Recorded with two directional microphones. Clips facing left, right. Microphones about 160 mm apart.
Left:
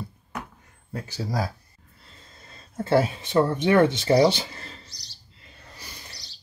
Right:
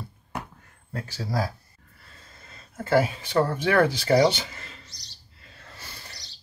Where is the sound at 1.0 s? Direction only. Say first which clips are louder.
Even; 15° left (ahead or behind).